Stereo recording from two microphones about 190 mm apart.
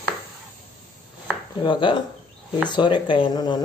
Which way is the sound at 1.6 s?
25° left (ahead or behind).